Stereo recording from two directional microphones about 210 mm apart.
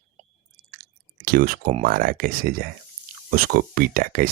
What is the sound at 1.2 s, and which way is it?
Speech, 45° right (ahead or behind).